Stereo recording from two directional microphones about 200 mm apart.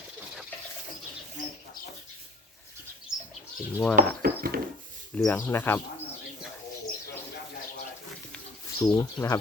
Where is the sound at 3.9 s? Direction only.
50° right (ahead or behind).